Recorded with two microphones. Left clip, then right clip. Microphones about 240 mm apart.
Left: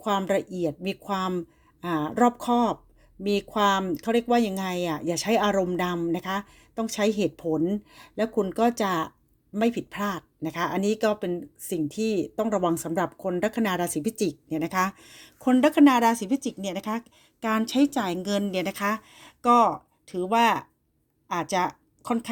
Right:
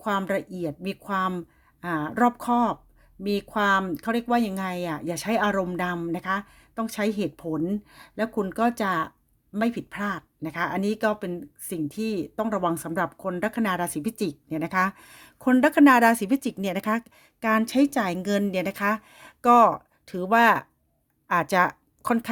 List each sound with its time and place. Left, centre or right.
0.0 s speech: centre
16.3 s speech: right
17.2 s a woman's voice: right
21.6 s a sound: right